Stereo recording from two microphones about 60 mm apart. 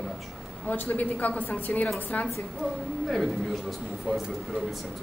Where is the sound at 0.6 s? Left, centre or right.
Left.